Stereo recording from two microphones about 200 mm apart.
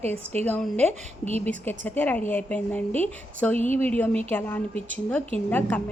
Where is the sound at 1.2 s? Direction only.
30° right (ahead or behind).